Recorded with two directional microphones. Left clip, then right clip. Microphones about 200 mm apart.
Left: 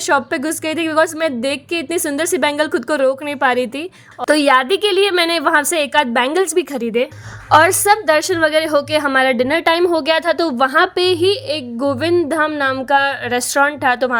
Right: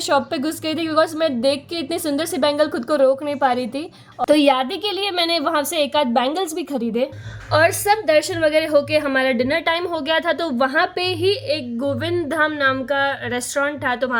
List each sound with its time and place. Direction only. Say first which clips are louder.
0.1 s a woman's voice: left 4 dB; 30° left (ahead or behind)